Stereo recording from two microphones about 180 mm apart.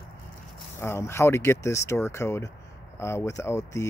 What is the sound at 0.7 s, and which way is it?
Speech, 15° left (ahead or behind).